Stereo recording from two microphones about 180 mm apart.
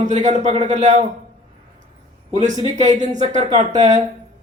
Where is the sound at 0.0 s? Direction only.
40° right (ahead or behind).